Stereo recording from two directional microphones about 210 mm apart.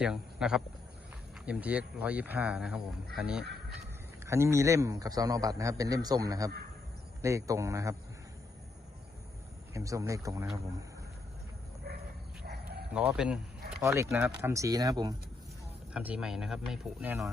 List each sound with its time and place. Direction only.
0.0 s a man's voice: 5° right (ahead or behind)
9.7 s a man's voice: 15° right (ahead or behind)
12.9 s a man's voice: 5° right (ahead or behind)
15.9 s speech: 5° right (ahead or behind)